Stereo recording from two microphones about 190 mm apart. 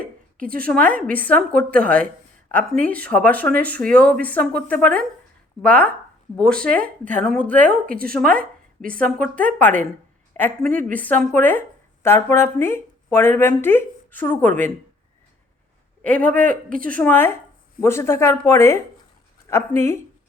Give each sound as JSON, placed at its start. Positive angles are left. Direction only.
{"t": 0.6, "sound": "speech", "side_deg": 5}
{"t": 7.0, "sound": "a woman's voice", "side_deg": -45}
{"t": 7.9, "sound": "speech", "side_deg": 5}
{"t": 10.7, "sound": "a woman's voice", "side_deg": -45}
{"t": 10.9, "sound": "speech", "side_deg": 10}
{"t": 16.0, "sound": "speech", "side_deg": 5}